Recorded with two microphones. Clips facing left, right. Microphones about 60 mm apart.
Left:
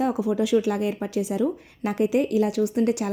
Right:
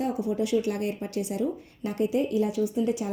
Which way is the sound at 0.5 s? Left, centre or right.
Left.